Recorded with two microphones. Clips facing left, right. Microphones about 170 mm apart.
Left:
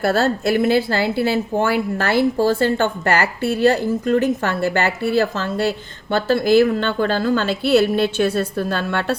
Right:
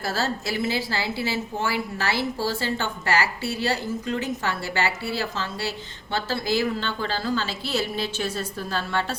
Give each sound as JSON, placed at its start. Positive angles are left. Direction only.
{"t": 0.0, "sound": "a woman's voice", "side_deg": 60}